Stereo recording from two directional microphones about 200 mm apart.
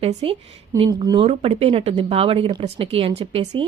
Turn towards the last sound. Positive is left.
turn(degrees=-30)  # may be behind; listen again after turning